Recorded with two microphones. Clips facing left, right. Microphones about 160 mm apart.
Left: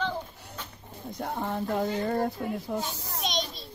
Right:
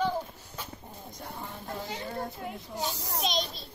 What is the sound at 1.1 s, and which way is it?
Speech, 65° left (ahead or behind).